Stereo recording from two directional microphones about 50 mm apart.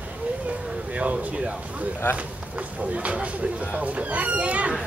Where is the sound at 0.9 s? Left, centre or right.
Right.